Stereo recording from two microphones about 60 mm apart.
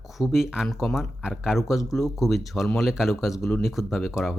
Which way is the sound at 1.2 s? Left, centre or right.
Centre.